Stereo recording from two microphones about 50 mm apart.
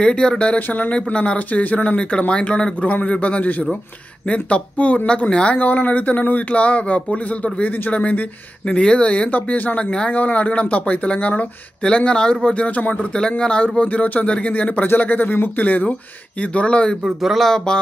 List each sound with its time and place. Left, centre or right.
0.0 s speech: centre
0.6 s speech: left
0.9 s speech: left
17.2 s a sound: centre